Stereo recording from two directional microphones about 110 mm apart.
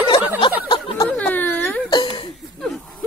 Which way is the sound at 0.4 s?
50° left (ahead or behind).